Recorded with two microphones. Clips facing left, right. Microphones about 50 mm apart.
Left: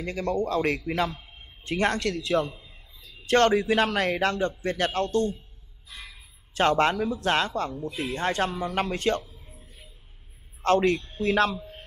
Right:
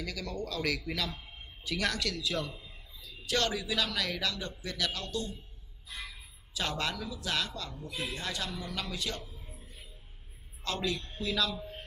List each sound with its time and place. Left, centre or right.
0.0 s a man's voice: left
3.0 s a man's voice: left
6.5 s a man's voice: left
10.6 s a man's voice: left